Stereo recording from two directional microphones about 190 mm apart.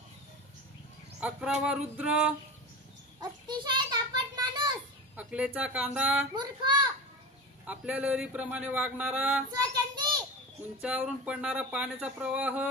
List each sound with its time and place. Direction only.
1.2 s speech: 5° right (ahead or behind)
1.6 s male singing: 5° right (ahead or behind)
3.2 s a sound: 25° right (ahead or behind)
5.1 s a man's voice: 10° right (ahead or behind)
6.3 s a child's voice: 25° right (ahead or behind)
7.6 s a man's voice: 5° right (ahead or behind)
10.8 s a man's voice: 5° right (ahead or behind)